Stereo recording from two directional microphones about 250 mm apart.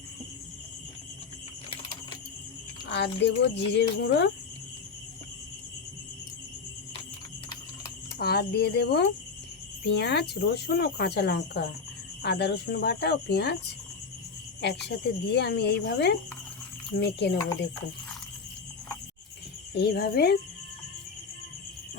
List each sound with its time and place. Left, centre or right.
2.9 s speech: left
8.2 s speech: left
14.6 s speech: left
19.7 s speech: left